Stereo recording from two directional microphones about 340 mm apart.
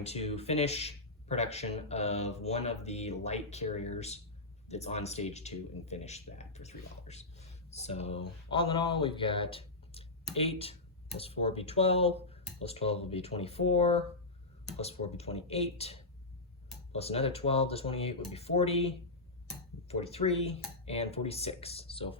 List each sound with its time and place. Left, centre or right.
0.0 s speech: centre